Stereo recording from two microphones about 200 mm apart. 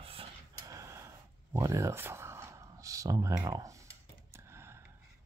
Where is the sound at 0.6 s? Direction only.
15° right (ahead or behind).